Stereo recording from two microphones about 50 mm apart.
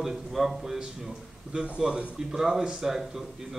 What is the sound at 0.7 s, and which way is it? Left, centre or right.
Speech, centre.